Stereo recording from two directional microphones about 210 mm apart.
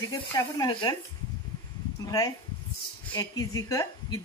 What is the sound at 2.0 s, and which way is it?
A woman's voice, 15° left (ahead or behind).